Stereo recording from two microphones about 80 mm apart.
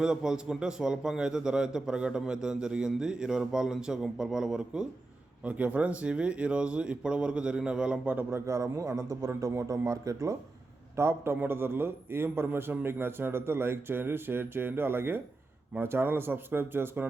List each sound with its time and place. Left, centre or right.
0.0 s a man's voice: centre
5.5 s a man's voice: centre
8.0 s a man's voice: right
8.4 s a man's voice: right